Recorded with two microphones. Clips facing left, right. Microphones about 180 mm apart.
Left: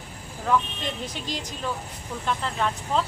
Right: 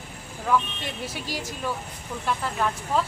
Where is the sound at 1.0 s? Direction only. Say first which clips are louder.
Right 1 dB; 10° right (ahead or behind).